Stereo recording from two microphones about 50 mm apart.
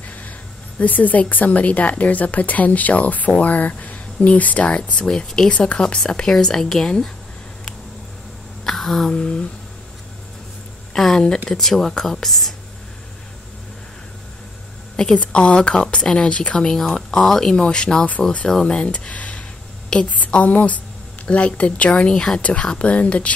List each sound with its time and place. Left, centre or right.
0.7 s a woman's voice: left; by 5.5 s centre
5.5 s a woman's voice: left
8.6 s a sound: centre
9.1 s speech: centre
11.0 s speech: centre
15.1 s a woman's voice: left
16.9 s speech: centre
17.6 s a woman's voice: centre
22.1 s speech: centre
22.4 s a woman's voice: left